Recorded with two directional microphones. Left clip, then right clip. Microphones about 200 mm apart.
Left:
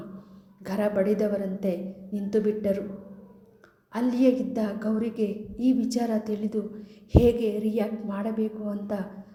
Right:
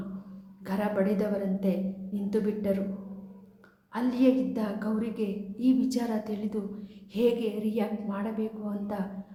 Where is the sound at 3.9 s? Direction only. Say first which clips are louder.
Left 2 dB; 15° left (ahead or behind).